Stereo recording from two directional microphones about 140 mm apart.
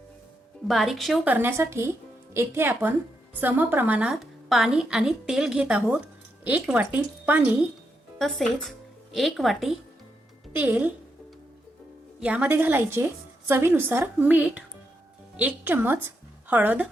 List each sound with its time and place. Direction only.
0.7 s a woman's voice: centre (ahead or behind)
1.3 s a woman's voice: 15° right (ahead or behind)
8.2 s a woman's voice: centre (ahead or behind)
10.5 s speech: 10° right (ahead or behind)
12.2 s a woman's voice: 10° right (ahead or behind)